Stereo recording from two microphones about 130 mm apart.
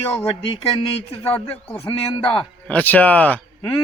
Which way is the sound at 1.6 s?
20° left (ahead or behind).